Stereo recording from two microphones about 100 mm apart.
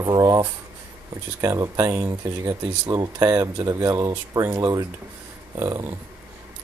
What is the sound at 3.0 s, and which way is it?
Speech, 30° right (ahead or behind).